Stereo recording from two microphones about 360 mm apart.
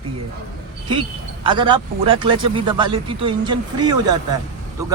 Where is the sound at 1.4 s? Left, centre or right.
Centre.